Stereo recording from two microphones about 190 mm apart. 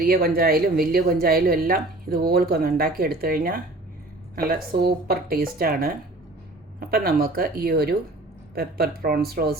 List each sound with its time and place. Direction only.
0.0 s speech: 50° right (ahead or behind)